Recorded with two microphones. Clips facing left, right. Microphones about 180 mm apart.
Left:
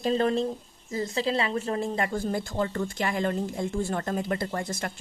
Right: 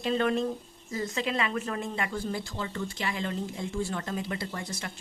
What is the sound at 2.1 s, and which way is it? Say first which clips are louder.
A woman's voice: left 5 dB; 50° left (ahead or behind).